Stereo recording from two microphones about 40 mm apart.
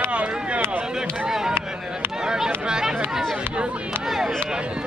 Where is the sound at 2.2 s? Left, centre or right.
Centre.